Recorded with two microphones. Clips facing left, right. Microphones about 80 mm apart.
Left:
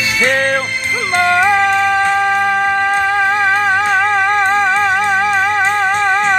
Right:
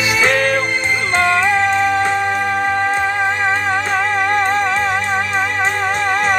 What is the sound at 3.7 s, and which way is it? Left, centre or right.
Music, left.